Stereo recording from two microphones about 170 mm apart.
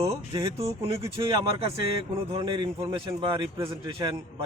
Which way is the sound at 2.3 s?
30° right (ahead or behind).